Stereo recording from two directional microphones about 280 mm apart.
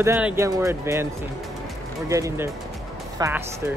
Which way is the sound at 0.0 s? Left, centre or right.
Centre.